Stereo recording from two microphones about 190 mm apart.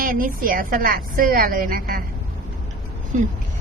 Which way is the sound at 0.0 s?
45° right (ahead or behind).